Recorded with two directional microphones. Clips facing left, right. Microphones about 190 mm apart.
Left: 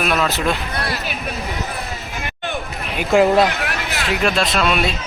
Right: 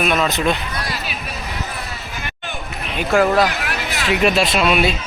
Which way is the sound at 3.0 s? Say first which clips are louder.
Left 2 dB; 20° left (ahead or behind).